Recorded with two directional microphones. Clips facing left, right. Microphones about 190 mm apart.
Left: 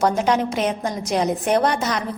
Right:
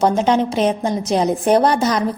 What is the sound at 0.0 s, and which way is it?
A woman's voice, 25° right (ahead or behind).